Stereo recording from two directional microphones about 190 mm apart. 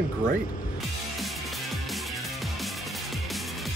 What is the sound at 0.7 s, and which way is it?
Music, centre (ahead or behind).